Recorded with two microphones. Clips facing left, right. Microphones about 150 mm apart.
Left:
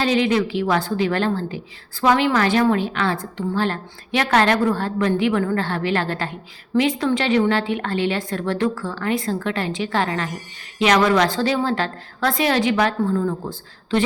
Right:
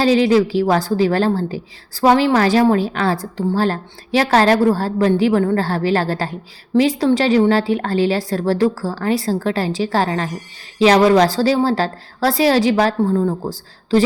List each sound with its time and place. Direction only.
0.0 s a woman's voice: 35° right (ahead or behind)